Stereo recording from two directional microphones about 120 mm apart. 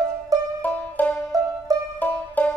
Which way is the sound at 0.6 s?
15° left (ahead or behind).